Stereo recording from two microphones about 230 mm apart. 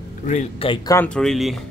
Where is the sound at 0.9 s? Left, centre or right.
Centre.